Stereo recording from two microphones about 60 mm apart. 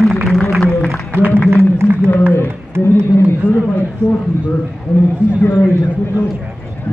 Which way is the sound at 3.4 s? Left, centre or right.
Left.